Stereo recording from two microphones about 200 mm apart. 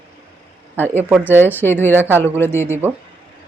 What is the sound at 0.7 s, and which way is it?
Speech, 10° left (ahead or behind).